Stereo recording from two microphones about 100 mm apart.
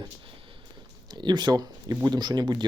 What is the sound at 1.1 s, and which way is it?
Speech, 45° right (ahead or behind).